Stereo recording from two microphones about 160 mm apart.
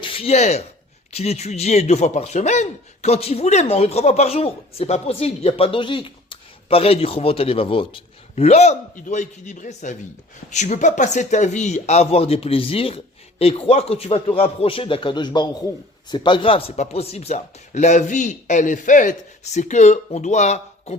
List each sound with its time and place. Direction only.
0.0 s a man's voice: 35° left (ahead or behind)